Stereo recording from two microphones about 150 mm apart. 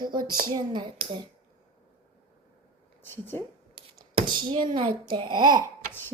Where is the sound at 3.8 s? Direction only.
35° right (ahead or behind).